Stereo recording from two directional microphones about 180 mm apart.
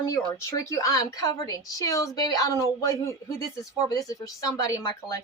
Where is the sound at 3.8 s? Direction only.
20° left (ahead or behind).